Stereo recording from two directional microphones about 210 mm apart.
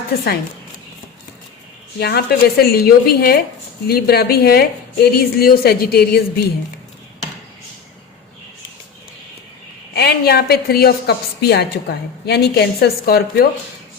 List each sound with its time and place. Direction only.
2.0 s a woman's voice: 50° left (ahead or behind)
9.9 s a woman's voice: 50° left (ahead or behind)